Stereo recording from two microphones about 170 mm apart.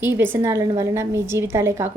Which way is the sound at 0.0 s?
10° right (ahead or behind).